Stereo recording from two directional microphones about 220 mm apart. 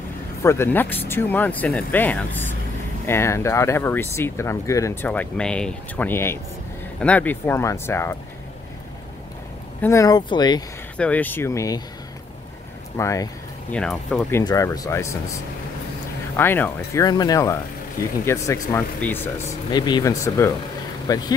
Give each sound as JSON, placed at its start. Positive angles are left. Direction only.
{"t": 0.4, "sound": "speech", "side_deg": 10}
{"t": 9.8, "sound": "speech", "side_deg": 15}
{"t": 11.0, "sound": "speech", "side_deg": 5}
{"t": 12.9, "sound": "speech", "side_deg": 15}
{"t": 13.7, "sound": "speech", "side_deg": 5}
{"t": 14.4, "sound": "speech", "side_deg": 15}